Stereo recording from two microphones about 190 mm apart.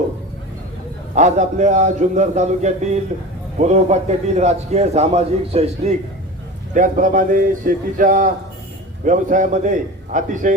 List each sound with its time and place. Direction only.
1.1 s a man's voice: 40° right (ahead or behind)
6.7 s a man's voice: 45° right (ahead or behind)